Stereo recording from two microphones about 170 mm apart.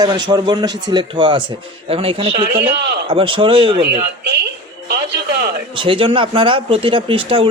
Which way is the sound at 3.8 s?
80° right.